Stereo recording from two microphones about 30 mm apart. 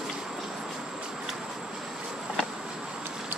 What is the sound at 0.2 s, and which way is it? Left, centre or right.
Vehicle, centre.